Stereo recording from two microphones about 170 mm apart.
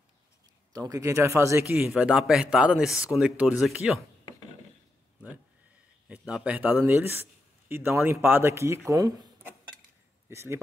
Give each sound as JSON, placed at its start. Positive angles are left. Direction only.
{"t": 0.7, "sound": "speech", "side_deg": -20}
{"t": 1.9, "sound": "a man's voice", "side_deg": -5}
{"t": 6.0, "sound": "a man's voice", "side_deg": -5}